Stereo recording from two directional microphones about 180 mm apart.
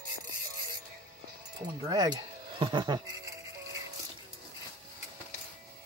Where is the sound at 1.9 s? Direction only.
25° right (ahead or behind).